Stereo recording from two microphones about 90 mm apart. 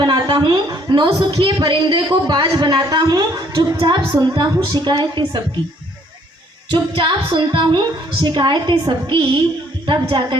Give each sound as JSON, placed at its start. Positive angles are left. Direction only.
{"t": 0.0, "sound": "a woman's voice", "side_deg": -55}
{"t": 6.7, "sound": "a woman's voice", "side_deg": -65}